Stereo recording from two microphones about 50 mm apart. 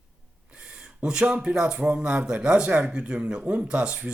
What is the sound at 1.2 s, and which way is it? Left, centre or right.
Speech, right.